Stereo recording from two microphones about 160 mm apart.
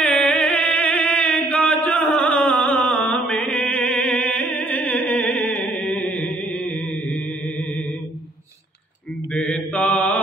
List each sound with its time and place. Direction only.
0.0 s chant: 5° left (ahead or behind)
9.3 s mantra: 10° left (ahead or behind)